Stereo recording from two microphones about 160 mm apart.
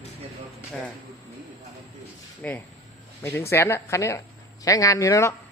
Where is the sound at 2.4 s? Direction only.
10° left (ahead or behind).